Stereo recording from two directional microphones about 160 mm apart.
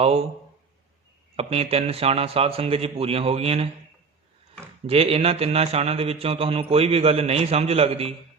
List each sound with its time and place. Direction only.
1.4 s a man's voice: 40° right (ahead or behind)
4.9 s a man's voice: 35° right (ahead or behind)